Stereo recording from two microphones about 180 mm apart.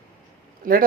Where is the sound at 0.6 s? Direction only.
50° right (ahead or behind).